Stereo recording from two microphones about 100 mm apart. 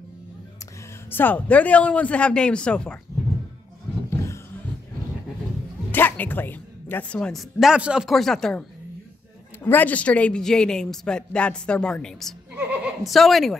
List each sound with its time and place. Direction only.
1.1 s speech: 20° left (ahead or behind)
4.1 s a sound: 30° left (ahead or behind)
5.9 s a woman's voice: 20° left (ahead or behind)
7.3 s speech: centre (ahead or behind)
9.6 s speech: 20° left (ahead or behind); by 13.6 s centre (ahead or behind)